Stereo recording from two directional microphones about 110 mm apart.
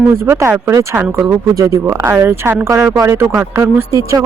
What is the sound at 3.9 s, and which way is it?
Speech, 30° right (ahead or behind).